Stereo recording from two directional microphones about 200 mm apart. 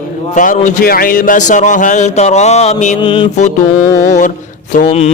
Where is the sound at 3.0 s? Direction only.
25° left (ahead or behind).